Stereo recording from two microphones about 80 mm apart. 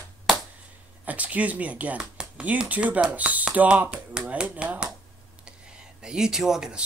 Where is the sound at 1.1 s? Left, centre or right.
Centre.